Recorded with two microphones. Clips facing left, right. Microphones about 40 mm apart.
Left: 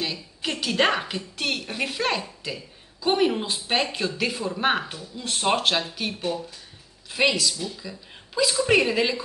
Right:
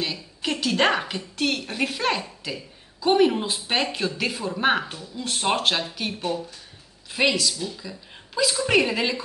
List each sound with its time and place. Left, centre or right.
0.0 s a woman's voice: centre